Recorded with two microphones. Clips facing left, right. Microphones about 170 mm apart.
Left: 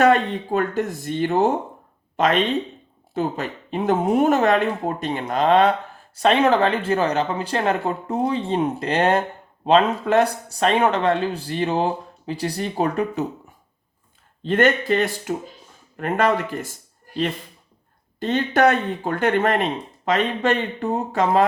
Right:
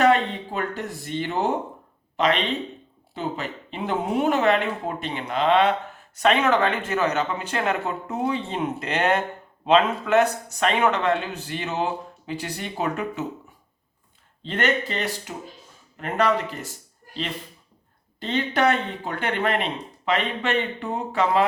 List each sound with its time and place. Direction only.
0.0 s speech: 45° left (ahead or behind)
14.4 s speech: 50° left (ahead or behind)
18.2 s speech: 45° left (ahead or behind)